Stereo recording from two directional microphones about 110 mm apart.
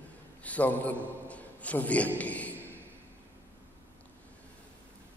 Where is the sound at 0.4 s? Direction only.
15° left (ahead or behind).